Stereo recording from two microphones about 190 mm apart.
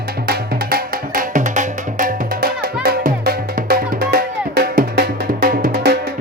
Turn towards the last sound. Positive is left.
turn(degrees=-55)  # may be behind; listen again after turning